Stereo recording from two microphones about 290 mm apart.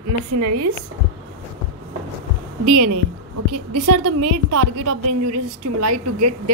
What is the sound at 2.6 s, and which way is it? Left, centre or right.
A woman's voice, right.